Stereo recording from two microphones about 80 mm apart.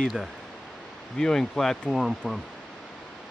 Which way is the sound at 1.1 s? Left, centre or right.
Centre.